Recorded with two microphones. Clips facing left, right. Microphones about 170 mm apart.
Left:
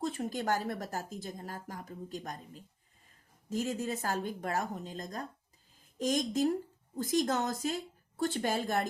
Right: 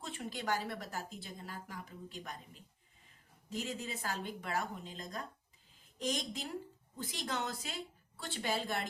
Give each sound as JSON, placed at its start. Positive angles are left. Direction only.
{"t": 0.0, "sound": "a woman's voice", "side_deg": 40}